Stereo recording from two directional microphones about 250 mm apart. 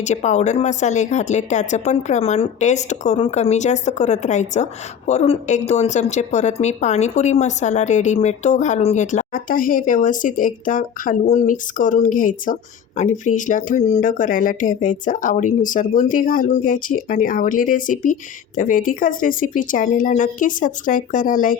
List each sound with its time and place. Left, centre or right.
0.0 s speech: left